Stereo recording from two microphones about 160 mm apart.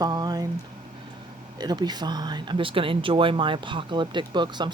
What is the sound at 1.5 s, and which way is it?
Speech, 25° right (ahead or behind).